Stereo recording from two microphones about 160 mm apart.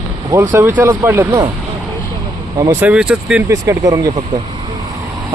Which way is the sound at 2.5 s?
25° right (ahead or behind).